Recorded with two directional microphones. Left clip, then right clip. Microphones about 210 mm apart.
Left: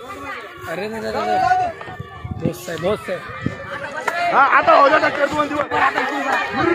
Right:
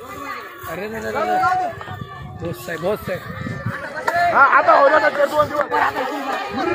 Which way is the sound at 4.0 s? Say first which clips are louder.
Right 2 dB; 50° left (ahead or behind).